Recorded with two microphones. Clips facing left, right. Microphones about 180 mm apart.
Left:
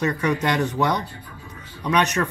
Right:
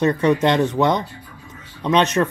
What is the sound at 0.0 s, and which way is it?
Speech, 25° right (ahead or behind).